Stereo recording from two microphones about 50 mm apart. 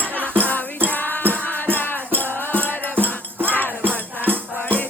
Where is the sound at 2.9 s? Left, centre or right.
Right.